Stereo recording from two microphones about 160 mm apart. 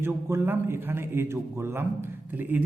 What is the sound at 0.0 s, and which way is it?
A man's voice, 15° right (ahead or behind).